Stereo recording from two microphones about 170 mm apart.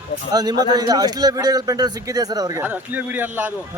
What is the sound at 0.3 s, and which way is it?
A man's voice, 25° right (ahead or behind).